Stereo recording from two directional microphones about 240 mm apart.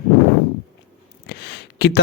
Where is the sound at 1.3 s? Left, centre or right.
Left.